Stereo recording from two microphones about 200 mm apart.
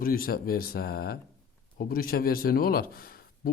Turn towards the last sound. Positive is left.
turn(degrees=50)  # may be behind; listen again after turning